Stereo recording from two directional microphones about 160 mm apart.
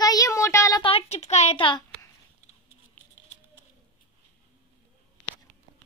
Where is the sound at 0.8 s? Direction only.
35° left (ahead or behind).